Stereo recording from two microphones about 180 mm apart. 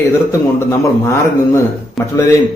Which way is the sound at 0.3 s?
15° left (ahead or behind).